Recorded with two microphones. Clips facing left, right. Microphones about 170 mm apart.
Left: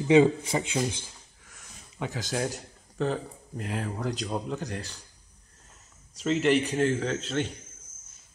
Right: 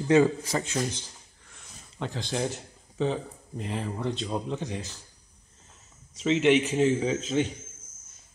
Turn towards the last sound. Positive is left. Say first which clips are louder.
# right 3 dB
turn(degrees=0)  # may be behind; listen again after turning